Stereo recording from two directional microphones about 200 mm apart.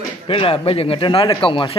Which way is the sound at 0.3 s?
25° left (ahead or behind).